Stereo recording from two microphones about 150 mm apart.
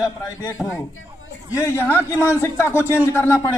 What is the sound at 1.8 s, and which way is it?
Speech, 15° left (ahead or behind).